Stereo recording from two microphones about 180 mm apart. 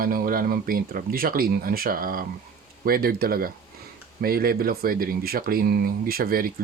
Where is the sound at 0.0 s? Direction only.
55° right (ahead or behind).